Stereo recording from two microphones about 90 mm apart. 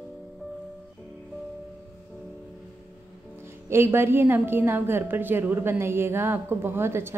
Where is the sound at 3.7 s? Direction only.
30° right (ahead or behind).